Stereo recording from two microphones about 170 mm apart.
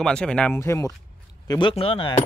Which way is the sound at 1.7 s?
35° left (ahead or behind).